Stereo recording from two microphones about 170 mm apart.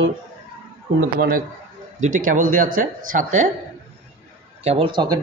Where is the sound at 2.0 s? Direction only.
50° right (ahead or behind).